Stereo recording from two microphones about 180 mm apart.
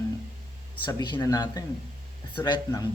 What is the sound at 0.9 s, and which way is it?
Speech, 25° left (ahead or behind).